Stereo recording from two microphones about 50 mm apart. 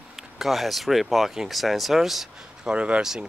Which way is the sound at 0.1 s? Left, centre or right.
Centre.